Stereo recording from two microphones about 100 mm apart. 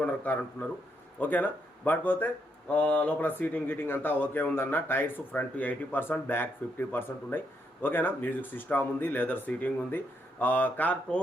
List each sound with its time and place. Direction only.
0.0 s speech: 15° left (ahead or behind)